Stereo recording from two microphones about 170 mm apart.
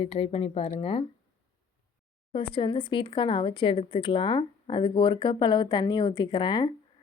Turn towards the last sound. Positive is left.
turn(degrees=25)  # may be behind; listen again after turning